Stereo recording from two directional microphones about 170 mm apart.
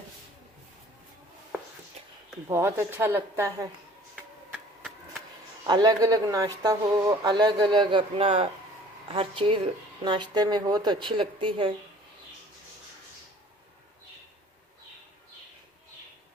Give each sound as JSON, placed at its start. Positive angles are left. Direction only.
{"t": 2.5, "sound": "speech", "side_deg": -15}
{"t": 4.1, "sound": "a sound", "side_deg": 0}
{"t": 5.6, "sound": "a woman's voice", "side_deg": -25}